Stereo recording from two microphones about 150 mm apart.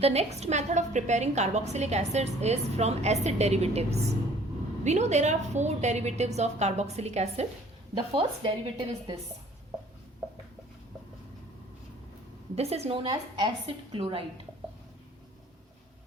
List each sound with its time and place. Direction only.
0.0 s a woman's voice: 45° right (ahead or behind)
8.1 s a woman's voice: 35° right (ahead or behind)
12.5 s a woman's voice: 45° right (ahead or behind)